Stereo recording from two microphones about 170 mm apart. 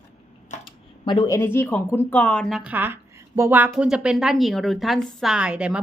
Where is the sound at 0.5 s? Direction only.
45° left (ahead or behind).